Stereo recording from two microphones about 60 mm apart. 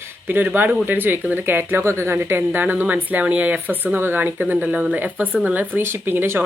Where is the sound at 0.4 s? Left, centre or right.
Right.